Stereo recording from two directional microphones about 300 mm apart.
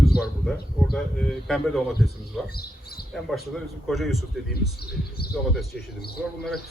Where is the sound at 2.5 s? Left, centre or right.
Left.